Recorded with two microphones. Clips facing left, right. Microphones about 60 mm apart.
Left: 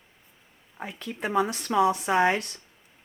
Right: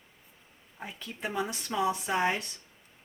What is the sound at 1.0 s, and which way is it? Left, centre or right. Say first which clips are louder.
Speech: left 8 dB; left.